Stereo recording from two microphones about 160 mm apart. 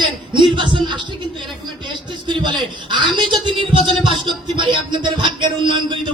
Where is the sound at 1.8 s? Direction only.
30° right (ahead or behind).